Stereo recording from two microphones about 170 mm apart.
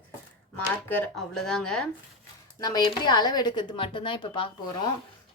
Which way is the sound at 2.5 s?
25° left (ahead or behind).